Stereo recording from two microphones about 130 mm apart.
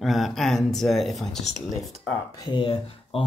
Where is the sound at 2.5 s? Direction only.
40° left (ahead or behind).